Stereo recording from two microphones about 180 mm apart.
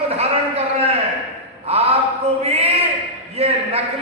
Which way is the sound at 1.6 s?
35° right (ahead or behind).